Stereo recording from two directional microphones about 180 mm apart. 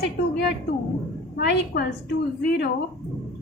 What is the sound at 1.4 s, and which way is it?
Speech, 60° left (ahead or behind).